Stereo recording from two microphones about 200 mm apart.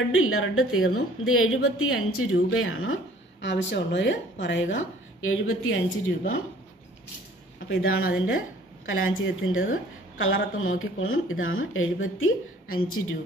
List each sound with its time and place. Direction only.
0.2 s a woman's voice: 90° left
7.6 s a woman's voice: 85° left